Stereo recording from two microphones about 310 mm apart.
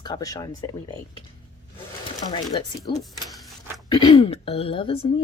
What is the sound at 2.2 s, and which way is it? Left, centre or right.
Speech, centre.